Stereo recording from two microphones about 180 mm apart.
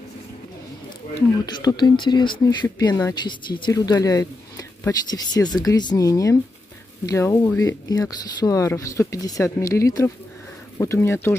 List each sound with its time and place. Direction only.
1.4 s speech: 20° left (ahead or behind)